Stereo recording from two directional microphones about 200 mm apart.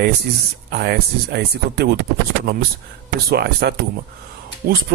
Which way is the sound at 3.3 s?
55° right (ahead or behind).